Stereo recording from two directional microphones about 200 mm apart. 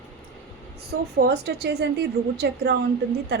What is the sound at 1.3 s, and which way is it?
A woman's voice, 55° right (ahead or behind).